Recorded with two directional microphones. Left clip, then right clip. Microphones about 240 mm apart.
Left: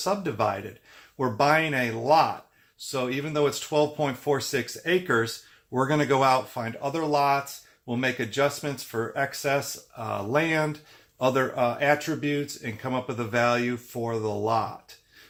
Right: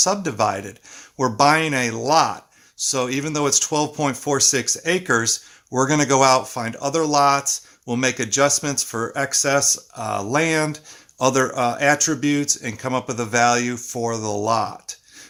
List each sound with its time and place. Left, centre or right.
0.0 s speech: right